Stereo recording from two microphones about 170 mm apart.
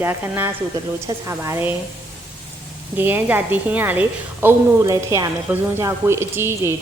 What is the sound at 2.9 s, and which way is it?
A woman's voice, 10° right (ahead or behind).